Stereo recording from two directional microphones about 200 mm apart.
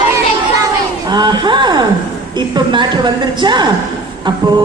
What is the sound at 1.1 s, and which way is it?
A woman's voice, 20° right (ahead or behind).